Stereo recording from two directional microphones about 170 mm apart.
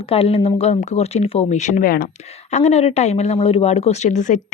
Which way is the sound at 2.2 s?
40° left (ahead or behind).